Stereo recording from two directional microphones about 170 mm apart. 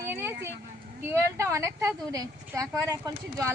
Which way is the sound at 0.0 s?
15° right (ahead or behind).